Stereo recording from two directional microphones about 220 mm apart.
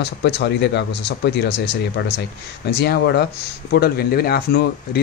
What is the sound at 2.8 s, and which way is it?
Speech, 45° left (ahead or behind).